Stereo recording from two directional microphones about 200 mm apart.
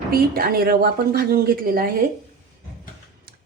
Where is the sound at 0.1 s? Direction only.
50° right (ahead or behind).